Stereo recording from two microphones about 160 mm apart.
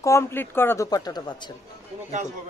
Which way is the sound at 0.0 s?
15° left (ahead or behind).